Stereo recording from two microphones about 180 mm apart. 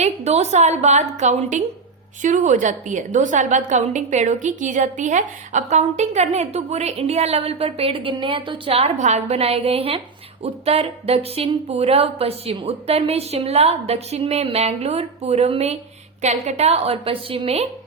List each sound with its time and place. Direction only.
0.0 s a woman's voice: 35° right (ahead or behind)